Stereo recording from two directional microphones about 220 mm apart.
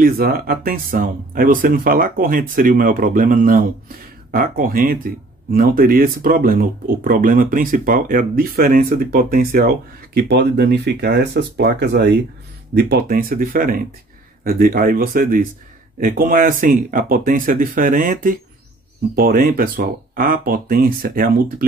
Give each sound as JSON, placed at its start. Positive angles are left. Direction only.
{"t": 0.0, "sound": "speech", "side_deg": -40}